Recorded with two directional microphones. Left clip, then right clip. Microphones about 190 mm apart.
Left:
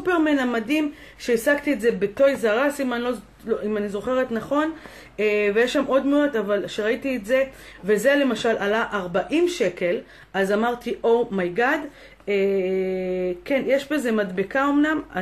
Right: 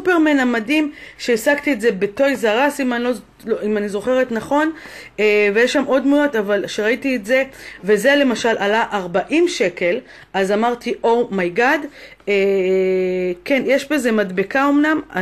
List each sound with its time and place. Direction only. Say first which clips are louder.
0.0 s speech: right 6 dB; 45° right (ahead or behind)